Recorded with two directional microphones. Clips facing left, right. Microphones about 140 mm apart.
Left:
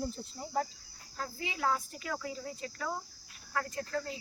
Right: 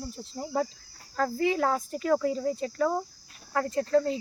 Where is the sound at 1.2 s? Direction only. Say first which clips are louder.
Right 11 dB; 65° right (ahead or behind).